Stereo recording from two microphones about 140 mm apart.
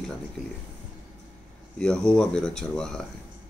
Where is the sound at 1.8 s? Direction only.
5° left (ahead or behind).